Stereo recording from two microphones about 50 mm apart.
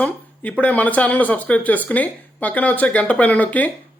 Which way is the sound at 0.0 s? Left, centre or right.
Left.